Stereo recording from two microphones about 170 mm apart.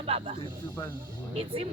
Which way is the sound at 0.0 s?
35° right (ahead or behind).